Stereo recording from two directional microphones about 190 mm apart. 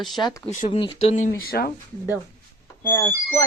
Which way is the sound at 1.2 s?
50° left (ahead or behind).